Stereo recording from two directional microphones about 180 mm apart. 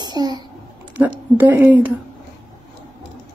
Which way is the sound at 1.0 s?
10° right (ahead or behind).